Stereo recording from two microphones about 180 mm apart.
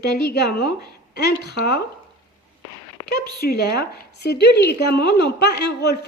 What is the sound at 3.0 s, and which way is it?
A woman's voice, 55° left (ahead or behind).